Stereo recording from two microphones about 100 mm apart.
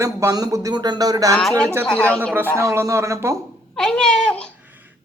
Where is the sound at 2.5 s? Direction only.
30° right (ahead or behind).